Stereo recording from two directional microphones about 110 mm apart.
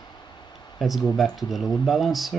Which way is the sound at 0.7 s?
Centre (ahead or behind).